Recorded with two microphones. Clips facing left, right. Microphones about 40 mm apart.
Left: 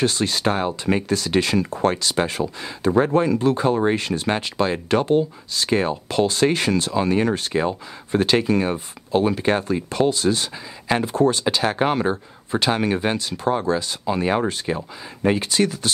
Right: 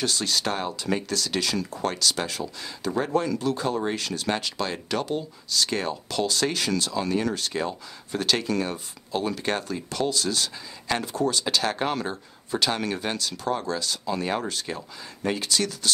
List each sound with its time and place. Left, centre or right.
0.0 s speech: left